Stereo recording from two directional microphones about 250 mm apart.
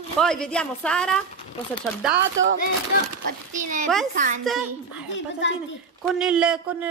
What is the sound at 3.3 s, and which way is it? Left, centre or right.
Speech, right.